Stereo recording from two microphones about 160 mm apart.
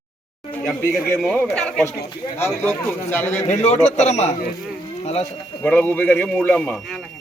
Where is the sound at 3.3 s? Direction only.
45° left (ahead or behind).